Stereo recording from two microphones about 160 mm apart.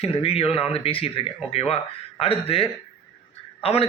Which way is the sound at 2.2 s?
40° left (ahead or behind).